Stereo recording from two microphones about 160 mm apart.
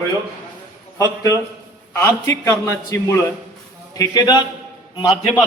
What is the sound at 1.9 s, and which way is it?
A man's voice, 15° left (ahead or behind).